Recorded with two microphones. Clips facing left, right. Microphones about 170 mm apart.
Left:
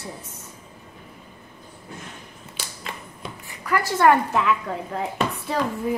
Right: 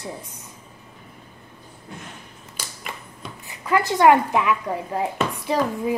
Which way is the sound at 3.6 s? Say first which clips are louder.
Right 2 dB; 20° right (ahead or behind).